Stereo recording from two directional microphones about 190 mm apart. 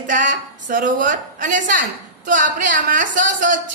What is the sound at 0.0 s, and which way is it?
A woman's voice, 45° right (ahead or behind).